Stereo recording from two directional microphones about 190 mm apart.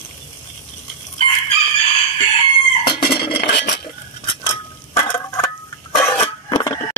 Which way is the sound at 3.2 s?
60° left (ahead or behind).